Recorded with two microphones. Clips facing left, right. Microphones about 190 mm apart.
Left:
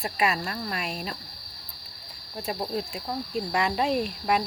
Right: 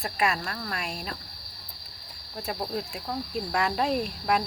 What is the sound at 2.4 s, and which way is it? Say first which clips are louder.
Speech: left 2 dB; centre (ahead or behind).